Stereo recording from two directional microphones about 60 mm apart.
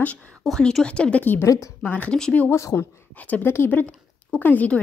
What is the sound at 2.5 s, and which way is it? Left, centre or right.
Speech, left.